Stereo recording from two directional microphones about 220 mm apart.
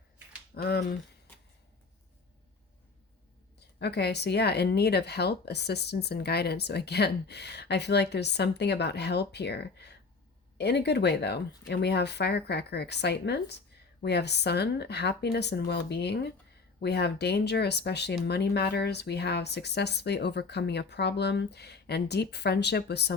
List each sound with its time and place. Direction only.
0.5 s speech: 45° left (ahead or behind)
3.8 s speech: 50° left (ahead or behind)